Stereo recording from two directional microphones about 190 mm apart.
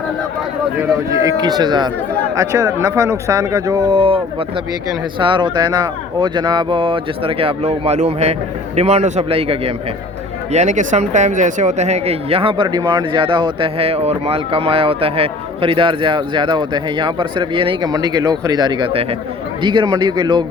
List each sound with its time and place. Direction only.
1.1 s speech: 15° right (ahead or behind)